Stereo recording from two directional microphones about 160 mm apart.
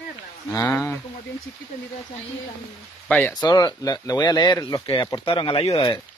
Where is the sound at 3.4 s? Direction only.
25° left (ahead or behind).